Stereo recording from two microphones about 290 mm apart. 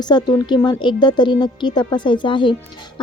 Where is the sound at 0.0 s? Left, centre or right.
Centre.